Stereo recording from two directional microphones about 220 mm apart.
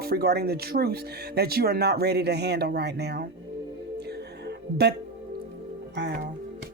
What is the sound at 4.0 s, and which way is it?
Music, 50° right (ahead or behind).